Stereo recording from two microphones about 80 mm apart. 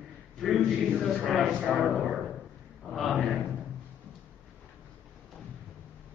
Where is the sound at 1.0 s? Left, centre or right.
Centre.